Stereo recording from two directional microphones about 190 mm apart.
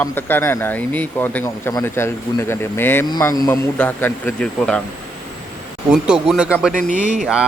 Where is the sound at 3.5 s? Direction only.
10° left (ahead or behind).